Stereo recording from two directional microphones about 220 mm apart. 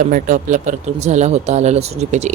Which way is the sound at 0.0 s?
35° right (ahead or behind).